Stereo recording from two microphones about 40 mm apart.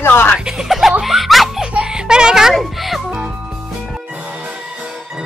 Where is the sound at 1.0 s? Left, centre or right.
Centre.